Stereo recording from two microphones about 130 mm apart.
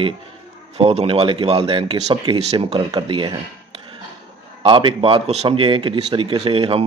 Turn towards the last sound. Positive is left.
turn(degrees=-45)  # may be behind; listen again after turning